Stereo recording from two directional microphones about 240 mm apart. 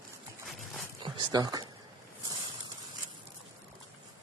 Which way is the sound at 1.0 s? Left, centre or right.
Centre.